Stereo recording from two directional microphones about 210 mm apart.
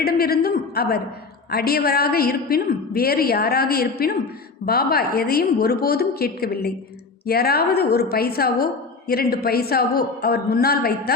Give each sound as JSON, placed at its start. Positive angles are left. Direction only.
{"t": 0.0, "sound": "a woman's voice", "side_deg": 45}